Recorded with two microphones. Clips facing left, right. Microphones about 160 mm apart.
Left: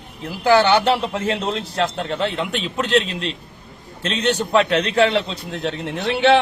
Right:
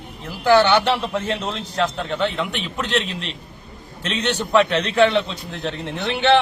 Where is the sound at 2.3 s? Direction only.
35° left (ahead or behind).